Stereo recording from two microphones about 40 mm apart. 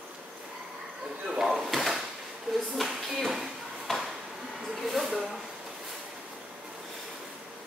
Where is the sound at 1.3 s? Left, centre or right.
Centre.